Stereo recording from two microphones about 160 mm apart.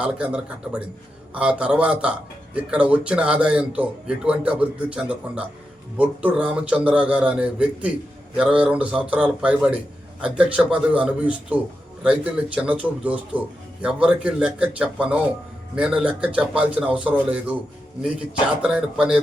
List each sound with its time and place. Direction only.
0.0 s a man's voice: 5° right (ahead or behind)
18.6 s a man's voice: 5° right (ahead or behind)